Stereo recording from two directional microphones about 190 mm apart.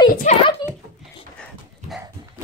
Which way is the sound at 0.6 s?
20° left (ahead or behind).